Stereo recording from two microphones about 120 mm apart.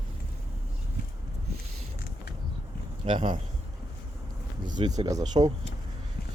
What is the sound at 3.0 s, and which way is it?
Speech, 45° right (ahead or behind).